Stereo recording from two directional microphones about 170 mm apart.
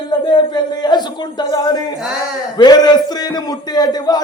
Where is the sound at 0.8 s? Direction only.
25° left (ahead or behind).